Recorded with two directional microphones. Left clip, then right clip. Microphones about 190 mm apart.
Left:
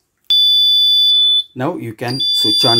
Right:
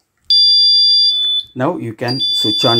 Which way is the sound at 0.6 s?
30° right (ahead or behind).